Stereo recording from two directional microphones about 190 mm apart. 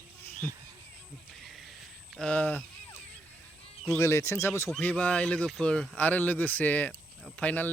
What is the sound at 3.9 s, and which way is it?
Speech, 15° left (ahead or behind).